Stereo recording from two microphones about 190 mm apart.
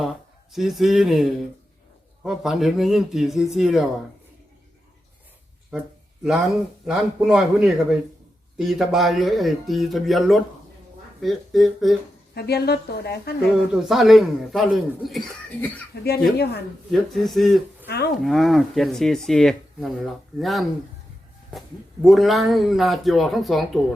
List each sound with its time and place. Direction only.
0.5 s speech: centre (ahead or behind)
6.2 s speech: centre (ahead or behind)
12.3 s speech: 55° left (ahead or behind)
13.7 s speech: centre (ahead or behind)
15.9 s speech: 60° left (ahead or behind)
16.9 s speech: centre (ahead or behind)
17.8 s speech: 60° left (ahead or behind)
18.2 s speech: centre (ahead or behind)
22.0 s speech: centre (ahead or behind)